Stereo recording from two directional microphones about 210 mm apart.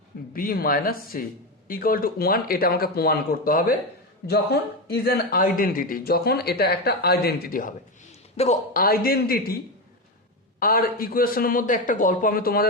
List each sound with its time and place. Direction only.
0.3 s speech: 45° left (ahead or behind)
4.9 s speech: 50° left (ahead or behind)
10.6 s speech: 45° left (ahead or behind)